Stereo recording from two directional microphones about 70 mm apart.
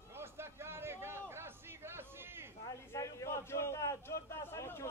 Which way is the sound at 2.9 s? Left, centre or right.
Left.